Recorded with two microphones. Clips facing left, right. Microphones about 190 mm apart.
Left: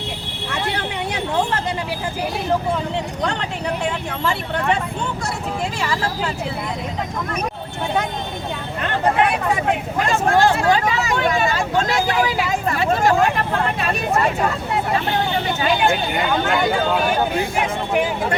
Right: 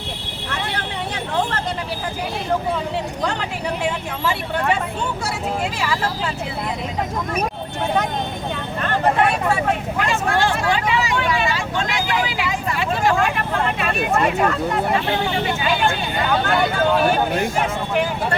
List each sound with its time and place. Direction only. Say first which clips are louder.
10.1 s speech: left 5 dB; 40° left (ahead or behind)